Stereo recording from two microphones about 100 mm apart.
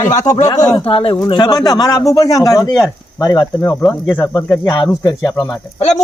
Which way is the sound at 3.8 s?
20° left (ahead or behind).